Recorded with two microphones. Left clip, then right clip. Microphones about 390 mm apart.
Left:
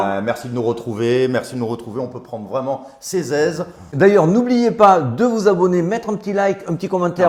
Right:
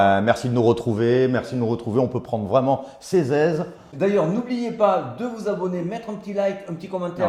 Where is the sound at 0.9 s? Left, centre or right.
Centre.